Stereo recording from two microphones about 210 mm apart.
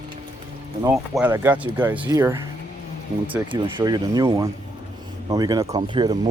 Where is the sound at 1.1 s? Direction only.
10° right (ahead or behind).